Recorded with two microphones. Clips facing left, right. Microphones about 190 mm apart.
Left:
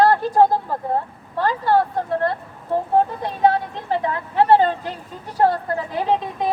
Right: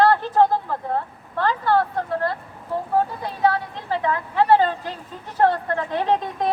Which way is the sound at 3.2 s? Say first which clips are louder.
Left 3 dB; 20° left (ahead or behind).